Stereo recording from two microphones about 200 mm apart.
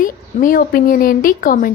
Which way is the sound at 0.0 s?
40° left (ahead or behind).